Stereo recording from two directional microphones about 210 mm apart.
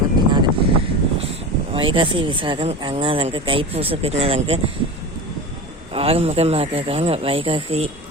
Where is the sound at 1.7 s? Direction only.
25° right (ahead or behind).